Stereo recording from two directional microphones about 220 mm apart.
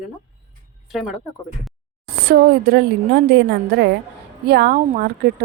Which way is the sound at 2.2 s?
45° right (ahead or behind).